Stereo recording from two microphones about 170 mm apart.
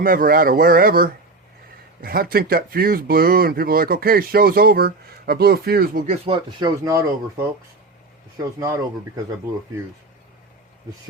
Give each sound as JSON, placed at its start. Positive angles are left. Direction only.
{"t": 0.0, "sound": "speech", "side_deg": -55}
{"t": 6.2, "sound": "speech", "side_deg": -30}
{"t": 8.4, "sound": "speech", "side_deg": -20}